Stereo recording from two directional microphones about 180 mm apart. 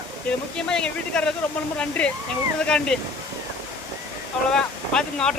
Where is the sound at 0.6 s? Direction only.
5° left (ahead or behind).